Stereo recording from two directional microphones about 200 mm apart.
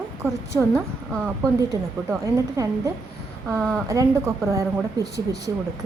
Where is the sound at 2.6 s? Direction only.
15° right (ahead or behind).